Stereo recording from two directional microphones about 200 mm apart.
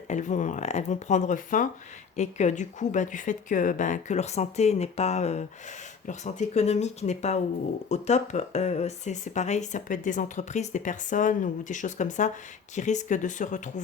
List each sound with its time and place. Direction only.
0.1 s speech: 40° left (ahead or behind)